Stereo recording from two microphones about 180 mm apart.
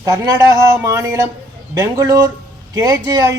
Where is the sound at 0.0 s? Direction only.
20° right (ahead or behind).